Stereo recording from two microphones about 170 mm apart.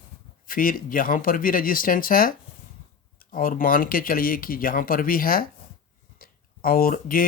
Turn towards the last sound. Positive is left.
turn(degrees=55)  # may be behind; listen again after turning